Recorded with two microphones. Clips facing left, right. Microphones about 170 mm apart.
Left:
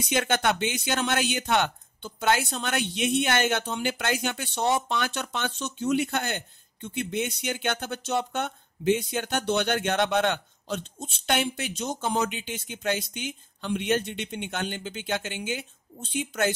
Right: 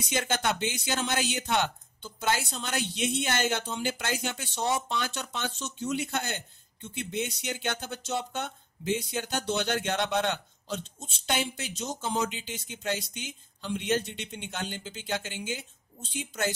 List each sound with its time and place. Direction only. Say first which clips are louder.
0.1 s speech: left 4 dB; 65° left (ahead or behind)